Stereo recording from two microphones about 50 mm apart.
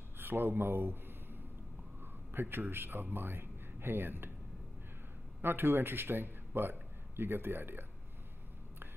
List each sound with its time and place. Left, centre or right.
0.2 s a sound: right
2.3 s speech: right
5.4 s a man's voice: right